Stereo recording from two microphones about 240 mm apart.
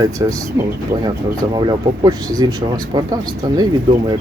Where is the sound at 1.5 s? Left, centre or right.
Centre.